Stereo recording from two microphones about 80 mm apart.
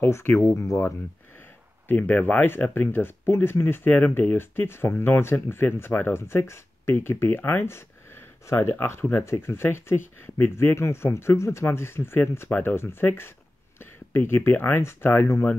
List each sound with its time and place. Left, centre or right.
0.0 s speech: left
1.9 s speech: left